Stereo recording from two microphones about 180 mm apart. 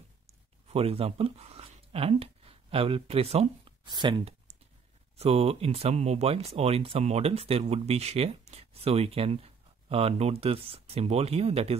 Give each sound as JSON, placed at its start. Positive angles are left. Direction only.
{"t": 0.7, "sound": "speech", "side_deg": -35}